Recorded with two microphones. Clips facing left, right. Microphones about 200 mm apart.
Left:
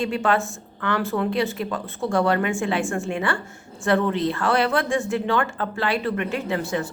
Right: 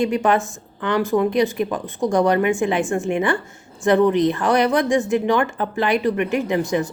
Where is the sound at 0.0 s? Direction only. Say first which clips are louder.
Right 4 dB; 15° right (ahead or behind).